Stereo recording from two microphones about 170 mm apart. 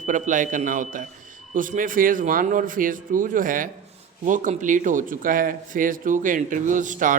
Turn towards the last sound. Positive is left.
turn(degrees=-50)  # may be behind; listen again after turning